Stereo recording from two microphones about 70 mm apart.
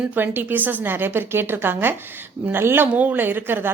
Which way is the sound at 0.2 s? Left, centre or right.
Right.